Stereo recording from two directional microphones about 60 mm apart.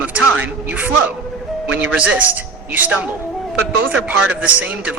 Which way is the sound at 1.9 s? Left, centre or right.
Right.